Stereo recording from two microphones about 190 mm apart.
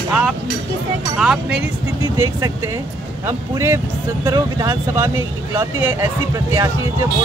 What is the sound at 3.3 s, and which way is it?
Speech, 15° right (ahead or behind).